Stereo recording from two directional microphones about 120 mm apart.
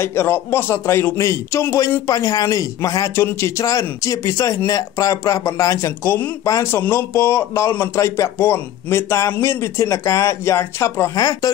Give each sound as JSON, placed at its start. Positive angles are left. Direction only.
{"t": 0.0, "sound": "speech", "side_deg": 20}